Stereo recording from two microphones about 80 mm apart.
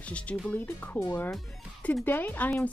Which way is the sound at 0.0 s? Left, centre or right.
Centre.